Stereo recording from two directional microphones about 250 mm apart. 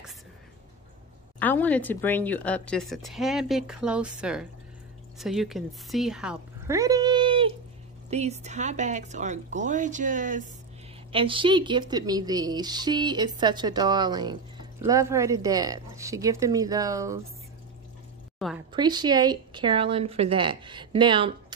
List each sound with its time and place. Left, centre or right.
1.4 s speech: centre
6.7 s a sound: centre
8.1 s speech: right
11.1 s speech: right
18.7 s speech: centre